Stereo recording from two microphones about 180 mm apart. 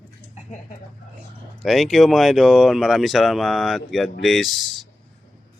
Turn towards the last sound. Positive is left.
turn(degrees=0)  # may be behind; listen again after turning